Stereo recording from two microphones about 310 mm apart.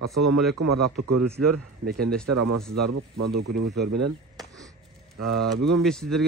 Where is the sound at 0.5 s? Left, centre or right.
Right.